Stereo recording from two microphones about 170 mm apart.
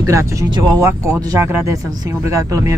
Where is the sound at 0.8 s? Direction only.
15° right (ahead or behind).